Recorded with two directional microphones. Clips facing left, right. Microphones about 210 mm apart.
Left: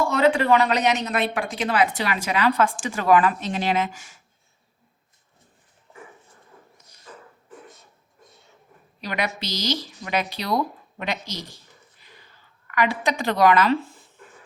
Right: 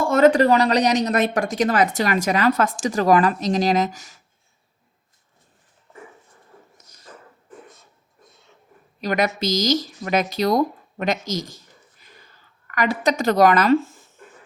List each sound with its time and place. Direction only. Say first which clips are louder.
0.0 s speech: right 5 dB; 45° right (ahead or behind)
9.0 s speech: right 6 dB; 45° right (ahead or behind)
12.6 s speech: right 2 dB; 40° right (ahead or behind)